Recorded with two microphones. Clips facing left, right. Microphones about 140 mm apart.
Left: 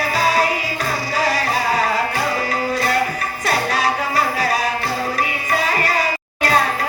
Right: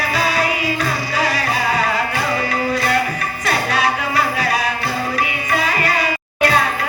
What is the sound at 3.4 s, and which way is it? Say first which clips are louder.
Music: even; 40° left (ahead or behind).